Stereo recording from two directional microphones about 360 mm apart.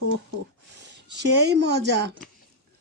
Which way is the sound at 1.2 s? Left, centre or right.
Right.